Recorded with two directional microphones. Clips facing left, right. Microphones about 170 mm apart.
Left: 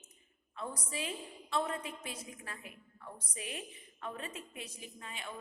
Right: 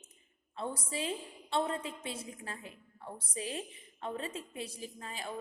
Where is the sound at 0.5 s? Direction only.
30° right (ahead or behind).